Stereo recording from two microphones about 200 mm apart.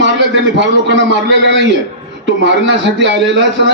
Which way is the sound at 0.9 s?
65° right (ahead or behind).